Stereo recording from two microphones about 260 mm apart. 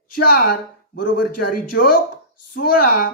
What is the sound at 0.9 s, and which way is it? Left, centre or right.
A woman's voice, left.